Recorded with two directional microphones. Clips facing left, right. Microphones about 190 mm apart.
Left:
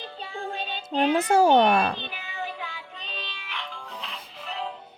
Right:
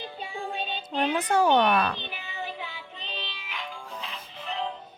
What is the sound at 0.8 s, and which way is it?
Child singing, 40° left (ahead or behind).